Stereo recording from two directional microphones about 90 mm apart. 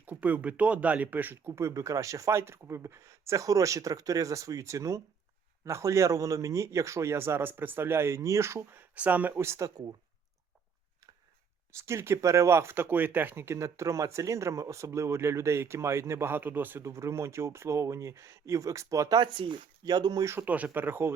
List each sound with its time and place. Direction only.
0.0 s speech: 15° right (ahead or behind); by 9.8 s 35° right (ahead or behind)
11.7 s speech: 30° right (ahead or behind)
19.2 s speech: 60° right (ahead or behind)
20.4 s speech: 15° right (ahead or behind)